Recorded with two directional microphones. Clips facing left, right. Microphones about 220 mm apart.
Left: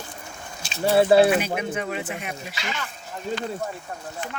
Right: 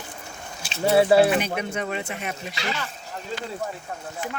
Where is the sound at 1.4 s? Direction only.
5° left (ahead or behind).